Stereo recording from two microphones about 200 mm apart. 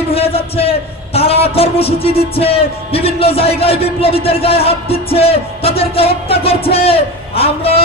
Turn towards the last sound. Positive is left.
turn(degrees=30)  # may be behind; listen again after turning